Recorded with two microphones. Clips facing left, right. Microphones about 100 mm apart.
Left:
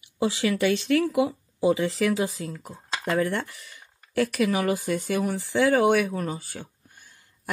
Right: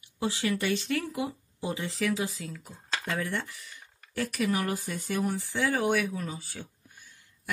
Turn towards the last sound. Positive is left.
turn(degrees=45)  # may be behind; listen again after turning